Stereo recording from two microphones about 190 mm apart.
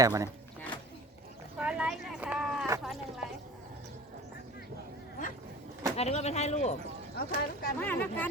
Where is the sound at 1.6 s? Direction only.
5° right (ahead or behind).